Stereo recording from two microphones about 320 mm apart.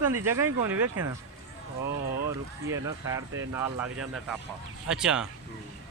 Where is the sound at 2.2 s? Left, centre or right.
Centre.